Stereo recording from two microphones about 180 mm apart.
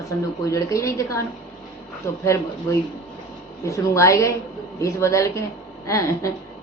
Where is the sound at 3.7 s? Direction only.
15° left (ahead or behind).